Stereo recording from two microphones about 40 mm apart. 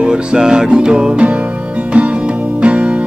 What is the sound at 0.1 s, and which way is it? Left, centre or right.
Music, centre.